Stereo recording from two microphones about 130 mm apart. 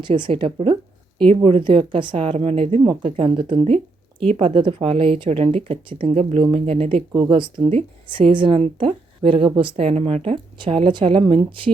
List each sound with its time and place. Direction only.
0.0 s speech: 40° right (ahead or behind)